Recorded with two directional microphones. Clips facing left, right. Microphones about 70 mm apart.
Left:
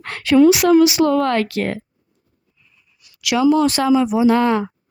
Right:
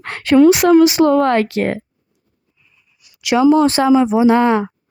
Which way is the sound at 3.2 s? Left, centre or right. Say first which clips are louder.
Right 3 dB; right.